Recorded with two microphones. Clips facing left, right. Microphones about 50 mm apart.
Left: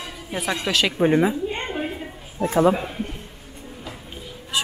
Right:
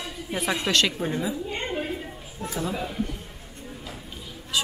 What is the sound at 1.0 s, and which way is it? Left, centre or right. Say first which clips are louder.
A woman's voice: left 9 dB; left.